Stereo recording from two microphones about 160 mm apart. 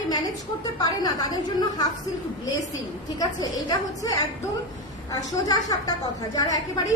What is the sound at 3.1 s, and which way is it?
A woman's voice, 25° left (ahead or behind).